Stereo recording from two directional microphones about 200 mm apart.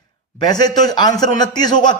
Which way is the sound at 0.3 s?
20° left (ahead or behind).